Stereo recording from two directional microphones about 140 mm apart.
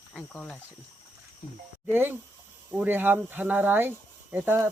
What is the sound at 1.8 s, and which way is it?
Speech, 15° right (ahead or behind).